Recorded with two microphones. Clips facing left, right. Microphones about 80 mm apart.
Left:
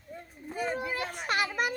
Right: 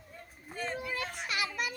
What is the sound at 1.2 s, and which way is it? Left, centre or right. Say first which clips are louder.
Children playing: left 7 dB; left.